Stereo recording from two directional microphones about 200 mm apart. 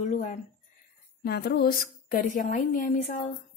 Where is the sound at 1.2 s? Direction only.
50° left (ahead or behind).